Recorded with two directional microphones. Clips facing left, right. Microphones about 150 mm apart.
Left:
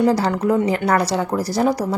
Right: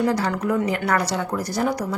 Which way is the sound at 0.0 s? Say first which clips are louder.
Left 5 dB; 30° left (ahead or behind).